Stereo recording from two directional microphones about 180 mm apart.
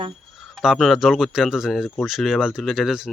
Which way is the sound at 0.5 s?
5° right (ahead or behind).